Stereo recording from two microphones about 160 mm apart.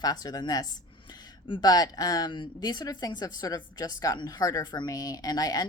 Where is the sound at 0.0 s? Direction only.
25° left (ahead or behind).